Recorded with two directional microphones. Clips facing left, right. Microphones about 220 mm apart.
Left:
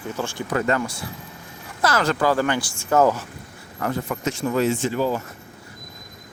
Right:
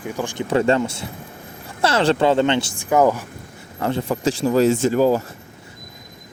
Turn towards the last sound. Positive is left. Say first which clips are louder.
# right 6 dB
turn(degrees=-40)  # may be behind; listen again after turning